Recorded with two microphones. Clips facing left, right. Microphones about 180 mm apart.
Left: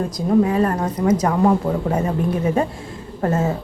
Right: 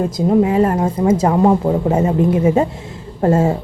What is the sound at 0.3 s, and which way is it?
A woman's voice, 20° right (ahead or behind).